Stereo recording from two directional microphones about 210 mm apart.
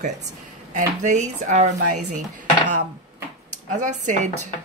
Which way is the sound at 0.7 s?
35° right (ahead or behind).